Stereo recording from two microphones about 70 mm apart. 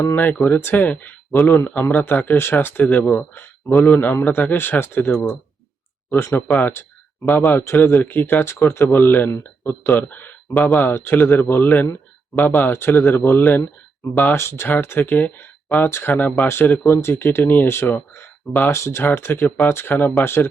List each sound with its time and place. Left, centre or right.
0.4 s speech: left
14.3 s speech: left
18.7 s speech: left